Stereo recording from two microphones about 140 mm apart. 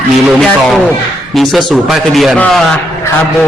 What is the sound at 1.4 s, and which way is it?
A man's voice, centre (ahead or behind).